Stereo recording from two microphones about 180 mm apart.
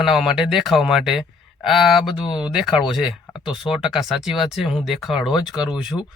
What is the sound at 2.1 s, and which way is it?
Speech, 25° left (ahead or behind).